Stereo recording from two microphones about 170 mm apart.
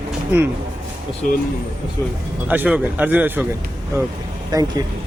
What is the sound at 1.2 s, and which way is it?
Speech, 50° left (ahead or behind).